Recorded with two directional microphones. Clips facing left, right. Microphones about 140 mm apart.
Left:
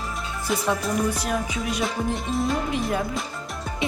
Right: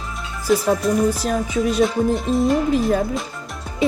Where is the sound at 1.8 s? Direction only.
Centre (ahead or behind).